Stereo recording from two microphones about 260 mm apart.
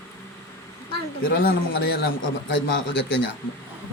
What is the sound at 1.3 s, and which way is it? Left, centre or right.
A man's voice, left.